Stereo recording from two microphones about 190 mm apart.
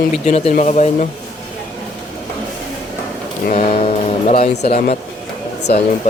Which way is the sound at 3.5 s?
35° left (ahead or behind).